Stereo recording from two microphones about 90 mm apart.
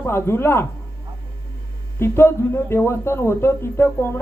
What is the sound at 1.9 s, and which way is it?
Speech, 30° left (ahead or behind).